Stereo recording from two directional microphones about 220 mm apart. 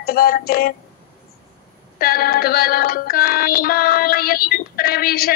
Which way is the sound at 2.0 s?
45° left (ahead or behind).